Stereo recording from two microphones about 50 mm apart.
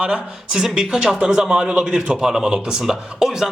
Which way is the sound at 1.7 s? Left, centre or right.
Right.